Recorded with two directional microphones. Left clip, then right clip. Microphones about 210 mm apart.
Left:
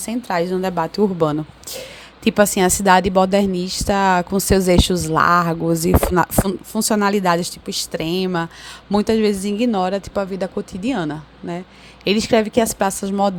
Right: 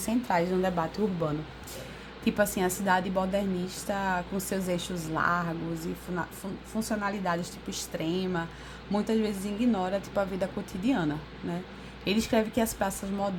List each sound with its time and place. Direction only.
0.0 s a woman's voice: 35° left (ahead or behind)